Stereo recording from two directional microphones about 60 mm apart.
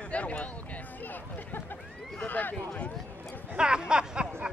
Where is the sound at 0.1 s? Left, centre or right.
Left.